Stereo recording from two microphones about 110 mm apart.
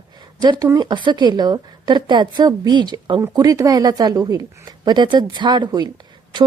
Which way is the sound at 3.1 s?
30° right (ahead or behind).